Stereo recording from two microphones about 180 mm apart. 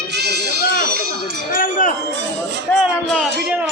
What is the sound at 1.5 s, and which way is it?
Jingle bell, 45° left (ahead or behind).